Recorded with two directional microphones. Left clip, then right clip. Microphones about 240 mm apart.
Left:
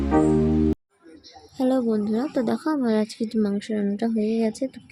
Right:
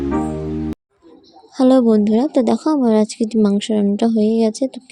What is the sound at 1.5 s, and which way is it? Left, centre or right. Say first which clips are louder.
A woman's voice: right 10 dB; right.